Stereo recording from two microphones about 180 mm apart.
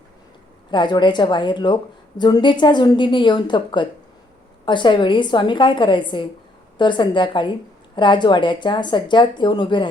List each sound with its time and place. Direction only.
0.7 s a woman's voice: 25° left (ahead or behind)